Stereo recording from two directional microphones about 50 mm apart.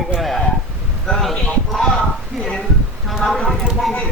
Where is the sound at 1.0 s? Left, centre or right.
Centre.